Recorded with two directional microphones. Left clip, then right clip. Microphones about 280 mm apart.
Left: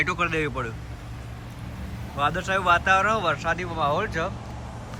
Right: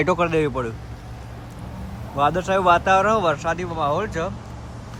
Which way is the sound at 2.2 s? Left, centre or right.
Centre.